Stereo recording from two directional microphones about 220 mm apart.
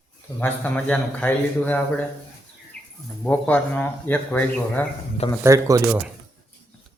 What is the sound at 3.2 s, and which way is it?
A man's voice, 5° left (ahead or behind).